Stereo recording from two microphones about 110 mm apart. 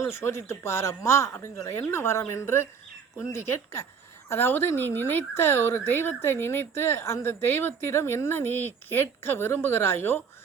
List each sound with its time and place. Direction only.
0.0 s speech: 25° left (ahead or behind)